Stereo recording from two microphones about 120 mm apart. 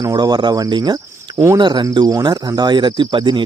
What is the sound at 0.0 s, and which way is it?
Speech, 35° right (ahead or behind).